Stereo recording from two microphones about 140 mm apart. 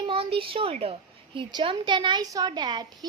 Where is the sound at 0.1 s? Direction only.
45° right (ahead or behind).